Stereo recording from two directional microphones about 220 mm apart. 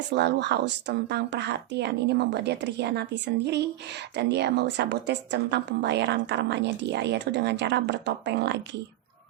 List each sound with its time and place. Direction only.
0.1 s speech: 50° right (ahead or behind)